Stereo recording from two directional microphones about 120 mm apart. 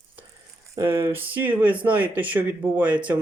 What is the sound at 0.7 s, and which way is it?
Speech, 20° right (ahead or behind).